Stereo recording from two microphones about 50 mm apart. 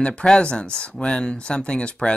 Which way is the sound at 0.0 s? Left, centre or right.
Left.